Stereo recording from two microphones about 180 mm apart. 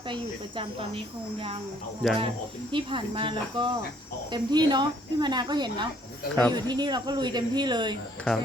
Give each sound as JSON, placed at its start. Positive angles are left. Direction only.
{"t": 0.1, "sound": "speech", "side_deg": -30}
{"t": 2.0, "sound": "speech", "side_deg": 5}
{"t": 2.7, "sound": "speech", "side_deg": -30}
{"t": 8.2, "sound": "speech", "side_deg": 5}